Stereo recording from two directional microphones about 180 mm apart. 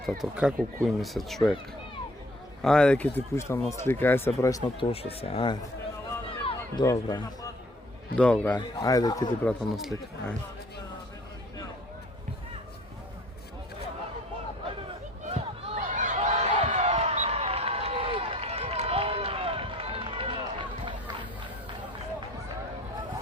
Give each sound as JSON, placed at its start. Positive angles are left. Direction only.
{"t": 0.0, "sound": "speech", "side_deg": 0}
{"t": 2.6, "sound": "speech", "side_deg": 5}
{"t": 4.8, "sound": "speech", "side_deg": 35}
{"t": 6.7, "sound": "a man's voice", "side_deg": 20}
{"t": 8.1, "sound": "speech", "side_deg": 5}
{"t": 8.8, "sound": "a man's voice", "side_deg": 20}
{"t": 9.4, "sound": "speech", "side_deg": 5}
{"t": 15.3, "sound": "a sound", "side_deg": -35}